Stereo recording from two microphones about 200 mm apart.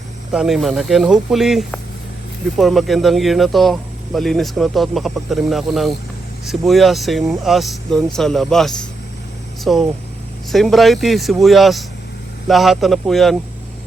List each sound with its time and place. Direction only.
0.3 s speech: centre (ahead or behind)